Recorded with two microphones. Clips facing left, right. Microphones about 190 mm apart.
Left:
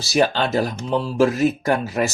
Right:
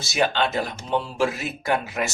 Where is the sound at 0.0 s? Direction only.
35° left (ahead or behind).